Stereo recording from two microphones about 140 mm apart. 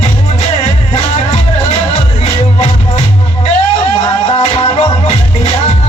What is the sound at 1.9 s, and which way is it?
Music, 45° left (ahead or behind).